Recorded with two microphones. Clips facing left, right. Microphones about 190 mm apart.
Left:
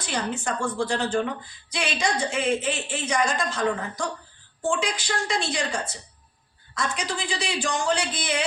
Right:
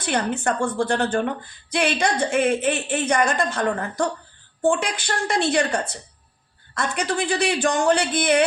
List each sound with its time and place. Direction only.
0.0 s a woman's voice: 60° right (ahead or behind)